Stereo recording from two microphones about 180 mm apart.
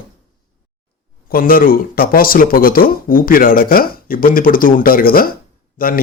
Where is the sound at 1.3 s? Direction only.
55° left (ahead or behind).